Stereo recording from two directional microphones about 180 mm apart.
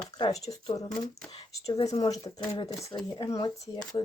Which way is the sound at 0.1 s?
20° left (ahead or behind).